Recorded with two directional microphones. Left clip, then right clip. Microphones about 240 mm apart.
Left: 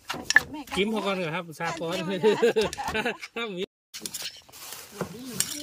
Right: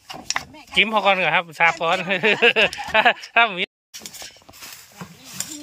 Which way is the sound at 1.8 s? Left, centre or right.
Right.